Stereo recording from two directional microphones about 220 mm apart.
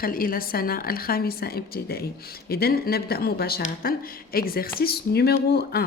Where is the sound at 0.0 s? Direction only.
40° left (ahead or behind).